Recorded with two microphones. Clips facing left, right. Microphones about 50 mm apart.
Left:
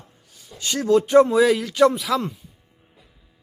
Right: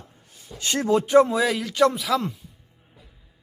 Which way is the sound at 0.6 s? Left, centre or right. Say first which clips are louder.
Even; right.